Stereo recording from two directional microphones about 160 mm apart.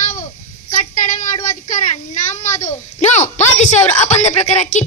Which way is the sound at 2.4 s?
50° left (ahead or behind).